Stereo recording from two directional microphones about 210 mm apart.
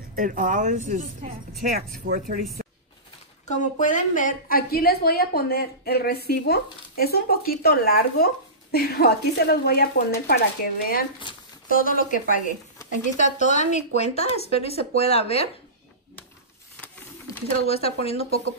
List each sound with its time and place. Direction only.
0.1 s speech: 40° right (ahead or behind)
3.4 s a woman's voice: 35° left (ahead or behind)
17.6 s speech: 30° left (ahead or behind)